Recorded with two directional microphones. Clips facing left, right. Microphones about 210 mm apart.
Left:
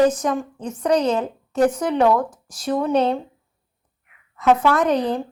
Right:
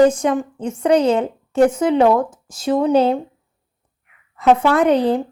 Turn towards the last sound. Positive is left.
turn(degrees=-30)  # may be behind; listen again after turning